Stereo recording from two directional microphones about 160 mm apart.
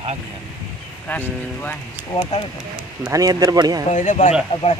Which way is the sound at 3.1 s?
20° right (ahead or behind).